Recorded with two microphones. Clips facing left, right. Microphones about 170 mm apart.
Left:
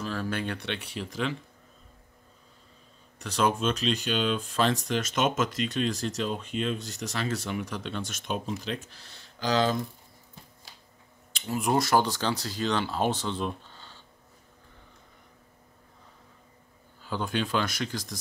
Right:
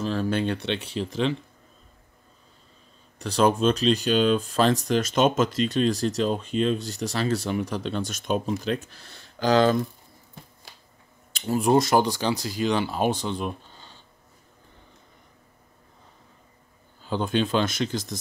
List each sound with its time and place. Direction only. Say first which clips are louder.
0.0 s speech: right 6 dB; 25° right (ahead or behind)
3.2 s speech: right 5 dB; 35° right (ahead or behind); by 9.8 s 55° right (ahead or behind)
11.3 s speech: right 6 dB; 35° right (ahead or behind); by 13.9 s 15° right (ahead or behind)
17.0 s speech: right 5 dB; 25° right (ahead or behind)